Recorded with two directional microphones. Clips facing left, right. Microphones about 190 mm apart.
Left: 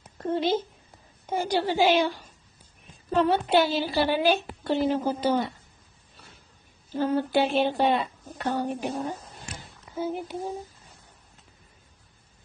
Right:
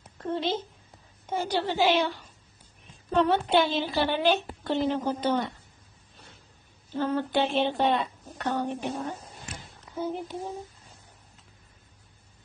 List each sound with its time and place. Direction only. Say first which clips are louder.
0.3 s a woman's voice: left 4 dB; 10° left (ahead or behind)
6.9 s a woman's voice: left 3 dB; 10° left (ahead or behind)